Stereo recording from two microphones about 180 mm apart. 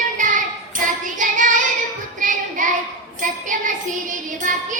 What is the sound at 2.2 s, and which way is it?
Child singing, 45° right (ahead or behind).